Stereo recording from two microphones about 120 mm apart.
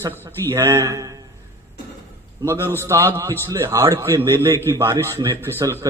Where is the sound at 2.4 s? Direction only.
20° right (ahead or behind).